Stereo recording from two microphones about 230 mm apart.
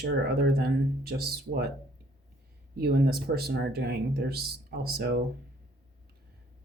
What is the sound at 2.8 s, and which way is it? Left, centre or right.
Speech, right.